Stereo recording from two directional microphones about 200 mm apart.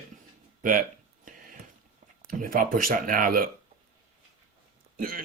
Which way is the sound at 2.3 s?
45° right (ahead or behind).